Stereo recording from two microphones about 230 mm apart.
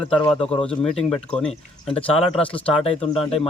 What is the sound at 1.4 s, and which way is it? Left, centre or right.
A man's voice, left.